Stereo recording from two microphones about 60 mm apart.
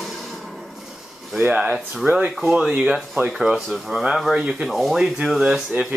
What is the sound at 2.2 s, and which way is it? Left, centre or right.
Speech, centre.